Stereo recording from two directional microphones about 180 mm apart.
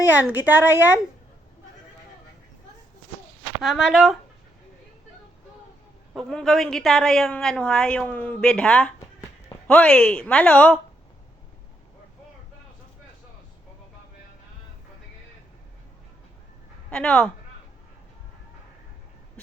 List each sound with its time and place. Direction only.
0.1 s a woman's voice: 10° right (ahead or behind)
3.6 s a woman's voice: centre (ahead or behind)
6.1 s a woman's voice: centre (ahead or behind)
16.9 s a woman's voice: 5° left (ahead or behind)